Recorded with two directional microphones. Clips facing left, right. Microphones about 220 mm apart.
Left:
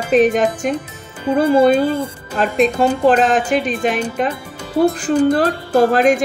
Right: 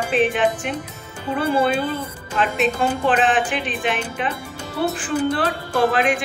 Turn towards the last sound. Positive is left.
turn(degrees=40)  # may be behind; listen again after turning